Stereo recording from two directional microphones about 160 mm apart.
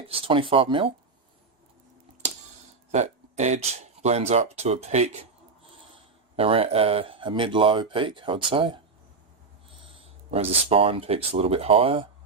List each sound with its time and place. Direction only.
0.1 s speech: 35° right (ahead or behind)
2.9 s speech: 45° right (ahead or behind)
10.3 s speech: 40° right (ahead or behind)